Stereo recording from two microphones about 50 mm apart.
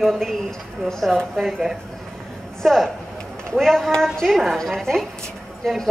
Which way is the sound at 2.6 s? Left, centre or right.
Centre.